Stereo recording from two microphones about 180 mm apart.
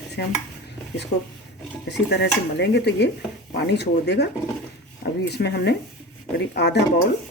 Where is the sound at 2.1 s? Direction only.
70° left (ahead or behind).